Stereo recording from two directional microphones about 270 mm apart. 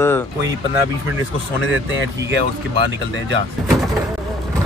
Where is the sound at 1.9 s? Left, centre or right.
Right.